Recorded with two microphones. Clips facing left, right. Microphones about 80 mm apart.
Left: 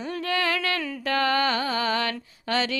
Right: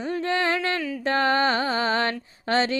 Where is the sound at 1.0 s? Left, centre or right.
Right.